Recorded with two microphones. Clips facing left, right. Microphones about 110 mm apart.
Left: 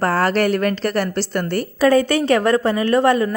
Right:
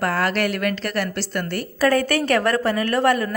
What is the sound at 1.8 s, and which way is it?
Speech, 20° left (ahead or behind).